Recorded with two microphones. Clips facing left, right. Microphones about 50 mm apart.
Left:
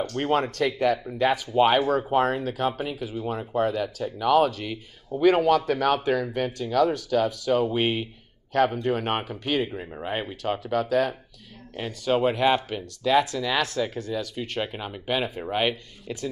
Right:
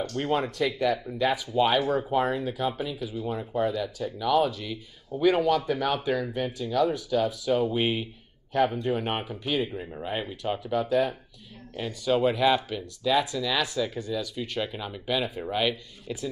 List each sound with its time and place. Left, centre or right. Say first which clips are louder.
0.1 s speech: left 4 dB; left
9.7 s speech: left 1 dB; left
10.4 s speech: left 2 dB; left
11.7 s speech: left 1 dB; left